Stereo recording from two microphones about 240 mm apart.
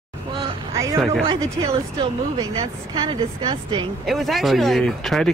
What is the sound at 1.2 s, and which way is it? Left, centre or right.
Speech, right.